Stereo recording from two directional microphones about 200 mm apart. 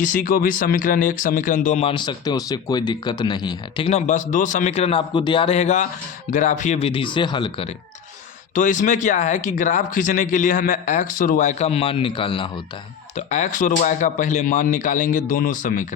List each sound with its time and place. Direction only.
0.0 s speech: 40° left (ahead or behind); by 7.7 s 25° left (ahead or behind)
8.5 s speech: 40° left (ahead or behind)
13.1 s speech: 35° left (ahead or behind)